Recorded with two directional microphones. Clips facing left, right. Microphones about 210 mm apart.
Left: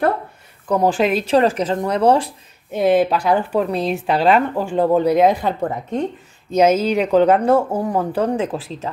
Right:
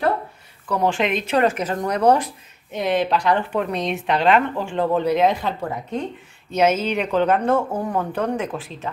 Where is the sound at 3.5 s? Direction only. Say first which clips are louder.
Left 4 dB; 35° left (ahead or behind).